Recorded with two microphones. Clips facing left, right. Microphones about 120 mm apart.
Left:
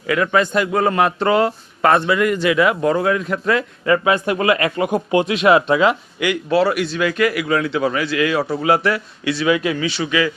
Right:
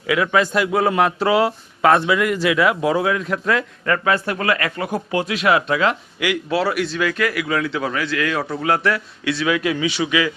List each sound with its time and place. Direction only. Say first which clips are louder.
0.1 s a man's voice: left 1 dB; 5° right (ahead or behind)
3.9 s speech: left 3 dB; 15° left (ahead or behind)
6.1 s a man's voice: left 4 dB; 5° right (ahead or behind)
9.8 s a man's voice: even; 10° right (ahead or behind)